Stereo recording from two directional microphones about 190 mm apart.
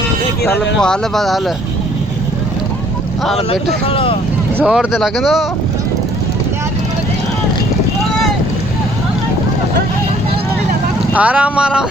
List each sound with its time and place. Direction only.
0.8 s speech: 5° left (ahead or behind)
3.8 s speech: 30° left (ahead or behind)
4.5 s speech: 5° right (ahead or behind)
11.1 s speech: 10° right (ahead or behind)